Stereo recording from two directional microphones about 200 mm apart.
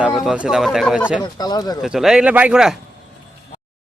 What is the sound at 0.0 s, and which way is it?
Speech, centre (ahead or behind).